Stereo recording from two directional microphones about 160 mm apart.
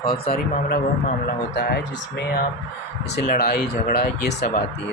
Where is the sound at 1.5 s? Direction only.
85° left.